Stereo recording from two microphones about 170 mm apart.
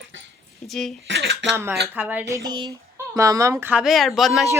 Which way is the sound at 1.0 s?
90° right.